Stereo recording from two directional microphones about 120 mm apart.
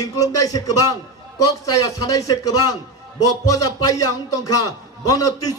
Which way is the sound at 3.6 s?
30° left (ahead or behind).